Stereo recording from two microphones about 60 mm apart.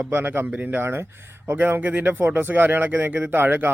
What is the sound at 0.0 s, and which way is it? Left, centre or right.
Speech, right.